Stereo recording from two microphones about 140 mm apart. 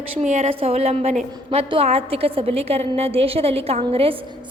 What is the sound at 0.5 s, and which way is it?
A woman's voice, 45° right (ahead or behind).